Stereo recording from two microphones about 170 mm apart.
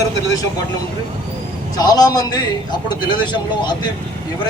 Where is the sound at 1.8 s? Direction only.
20° left (ahead or behind).